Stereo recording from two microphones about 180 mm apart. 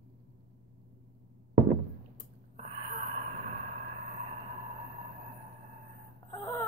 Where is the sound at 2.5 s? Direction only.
40° right (ahead or behind).